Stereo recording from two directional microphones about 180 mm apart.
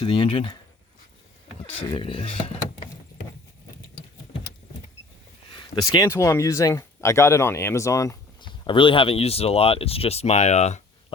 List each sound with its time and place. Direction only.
0.0 s speech: 30° left (ahead or behind)
2.0 s speech: 30° left (ahead or behind)
5.5 s speech: 25° left (ahead or behind)